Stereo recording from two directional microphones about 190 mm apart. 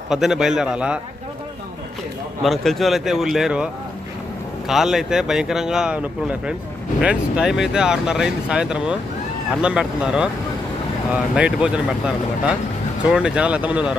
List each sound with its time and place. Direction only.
0.1 s speech: centre (ahead or behind)
2.4 s speech: centre (ahead or behind)
4.6 s speech: centre (ahead or behind)
11.3 s speech: 5° right (ahead or behind)
13.0 s speech: 5° right (ahead or behind)